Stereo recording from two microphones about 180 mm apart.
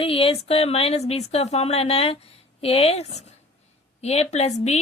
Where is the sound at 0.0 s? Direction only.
30° left (ahead or behind).